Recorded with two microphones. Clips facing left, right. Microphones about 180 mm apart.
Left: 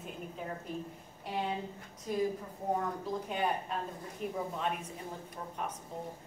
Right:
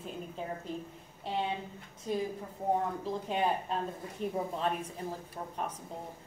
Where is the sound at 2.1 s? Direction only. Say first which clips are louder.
Right 1 dB; 30° right (ahead or behind).